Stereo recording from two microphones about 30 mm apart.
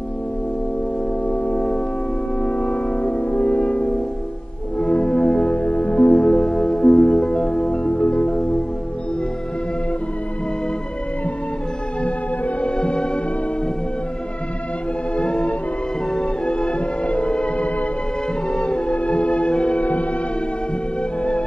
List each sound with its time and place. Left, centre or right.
1.2 s music: left
5.6 s music: left
6.1 s music: centre; by 8.5 s left
12.6 s music: left
15.1 s music: left
17.0 s music: left
18.5 s music: left
18.9 s music: left
19.8 s music: left